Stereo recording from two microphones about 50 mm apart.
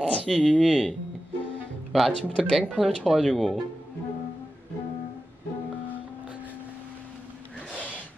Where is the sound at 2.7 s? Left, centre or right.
Centre.